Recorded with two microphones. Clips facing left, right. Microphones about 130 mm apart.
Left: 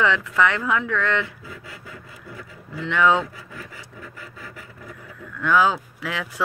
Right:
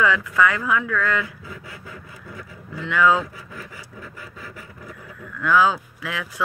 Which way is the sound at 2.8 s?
25° left (ahead or behind).